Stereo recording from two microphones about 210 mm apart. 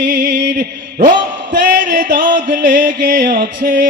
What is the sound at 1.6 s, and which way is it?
Music, 40° right (ahead or behind).